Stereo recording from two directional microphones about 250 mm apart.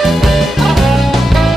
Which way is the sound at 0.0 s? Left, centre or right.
Centre.